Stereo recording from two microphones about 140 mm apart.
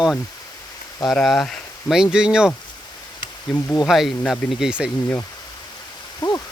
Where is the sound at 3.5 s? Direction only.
30° left (ahead or behind).